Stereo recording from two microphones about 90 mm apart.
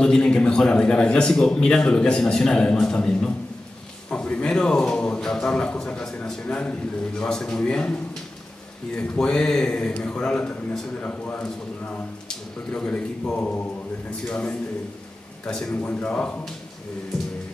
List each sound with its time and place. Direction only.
0.0 s a man's voice: 10° left (ahead or behind)